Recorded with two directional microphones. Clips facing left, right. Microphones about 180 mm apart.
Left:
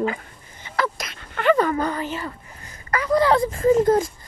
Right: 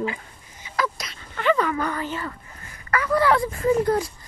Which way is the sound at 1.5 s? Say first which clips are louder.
Left 3 dB; 35° left (ahead or behind).